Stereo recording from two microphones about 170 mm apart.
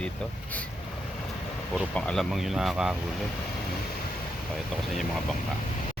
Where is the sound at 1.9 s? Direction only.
5° left (ahead or behind).